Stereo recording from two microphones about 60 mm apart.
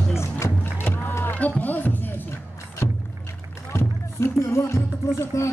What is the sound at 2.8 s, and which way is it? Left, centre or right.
Rowboat, left.